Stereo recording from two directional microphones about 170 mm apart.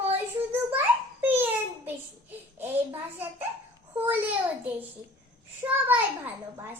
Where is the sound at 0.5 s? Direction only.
10° right (ahead or behind).